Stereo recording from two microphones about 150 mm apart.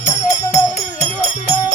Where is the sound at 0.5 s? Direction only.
50° left (ahead or behind).